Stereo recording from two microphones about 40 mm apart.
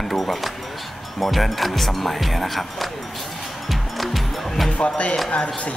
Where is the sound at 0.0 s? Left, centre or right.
Centre.